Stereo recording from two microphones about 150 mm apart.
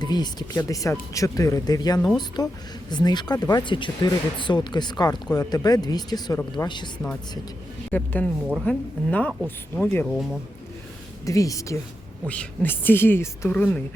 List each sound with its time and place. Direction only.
0.0 s speech: 30° left (ahead or behind)
7.9 s a woman's voice: 10° left (ahead or behind)
11.3 s speech: 20° left (ahead or behind)
12.3 s a woman's voice: 10° left (ahead or behind)